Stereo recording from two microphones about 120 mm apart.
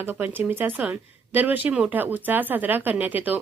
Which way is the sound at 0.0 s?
15° right (ahead or behind).